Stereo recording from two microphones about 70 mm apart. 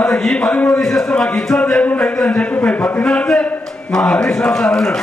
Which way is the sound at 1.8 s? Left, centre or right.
Centre.